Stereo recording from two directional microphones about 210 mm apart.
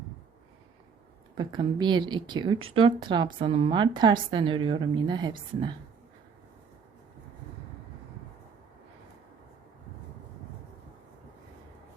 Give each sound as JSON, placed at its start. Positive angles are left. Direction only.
{"t": 1.4, "sound": "a woman's voice", "side_deg": -20}